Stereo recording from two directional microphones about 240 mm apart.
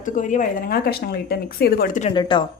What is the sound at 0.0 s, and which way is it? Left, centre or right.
A woman's voice, left.